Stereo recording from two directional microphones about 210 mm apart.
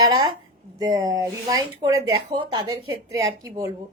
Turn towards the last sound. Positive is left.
turn(degrees=-15)  # may be behind; listen again after turning